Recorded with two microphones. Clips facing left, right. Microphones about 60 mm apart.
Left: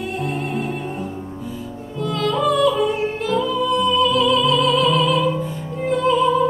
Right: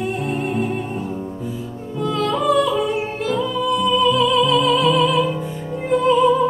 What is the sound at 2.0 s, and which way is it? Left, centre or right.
Music, centre.